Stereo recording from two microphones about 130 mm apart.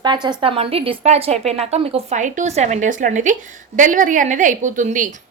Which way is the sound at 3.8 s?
90° right.